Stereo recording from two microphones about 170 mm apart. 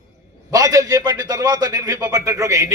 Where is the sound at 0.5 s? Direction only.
20° right (ahead or behind).